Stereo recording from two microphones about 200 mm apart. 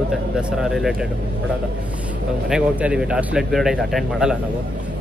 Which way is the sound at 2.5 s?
5° right (ahead or behind).